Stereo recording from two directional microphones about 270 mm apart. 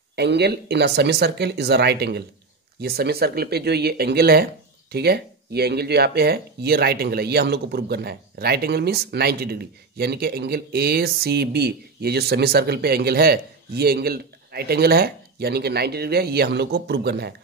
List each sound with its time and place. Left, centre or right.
0.1 s speech: right